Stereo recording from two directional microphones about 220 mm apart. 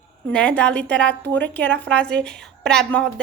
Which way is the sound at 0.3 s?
5° left (ahead or behind).